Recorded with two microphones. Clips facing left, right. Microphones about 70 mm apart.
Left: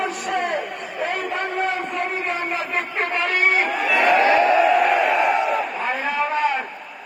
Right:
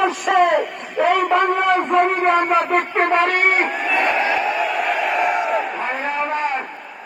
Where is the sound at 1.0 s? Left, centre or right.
Right.